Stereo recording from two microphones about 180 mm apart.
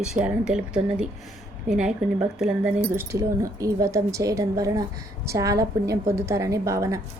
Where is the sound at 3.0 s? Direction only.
15° right (ahead or behind).